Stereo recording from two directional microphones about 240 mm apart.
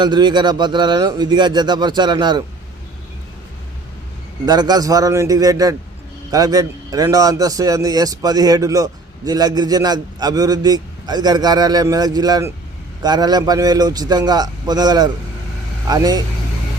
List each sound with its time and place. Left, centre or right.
0.0 s speech: centre
4.4 s a man's voice: centre